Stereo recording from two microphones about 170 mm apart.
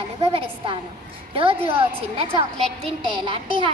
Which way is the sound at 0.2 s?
30° right (ahead or behind).